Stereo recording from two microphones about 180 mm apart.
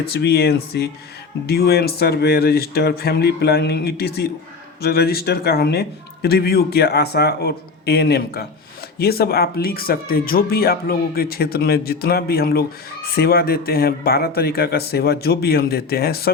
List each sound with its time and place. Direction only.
0.0 s speech: 60° left (ahead or behind)